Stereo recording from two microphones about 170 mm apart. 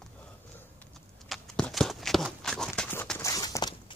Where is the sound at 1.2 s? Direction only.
5° left (ahead or behind).